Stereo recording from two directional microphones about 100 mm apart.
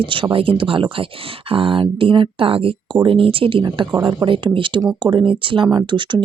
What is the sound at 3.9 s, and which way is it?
Speech, 45° right (ahead or behind).